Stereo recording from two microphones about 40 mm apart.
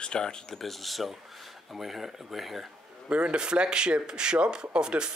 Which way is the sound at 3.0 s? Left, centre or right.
Right.